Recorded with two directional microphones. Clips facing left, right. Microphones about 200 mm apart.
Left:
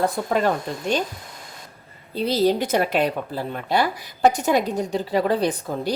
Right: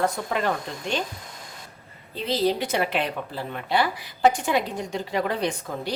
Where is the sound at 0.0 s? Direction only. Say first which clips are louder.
Left 4 dB; 40° left (ahead or behind).